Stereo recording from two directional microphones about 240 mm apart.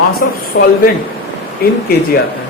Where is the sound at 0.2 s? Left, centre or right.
Left.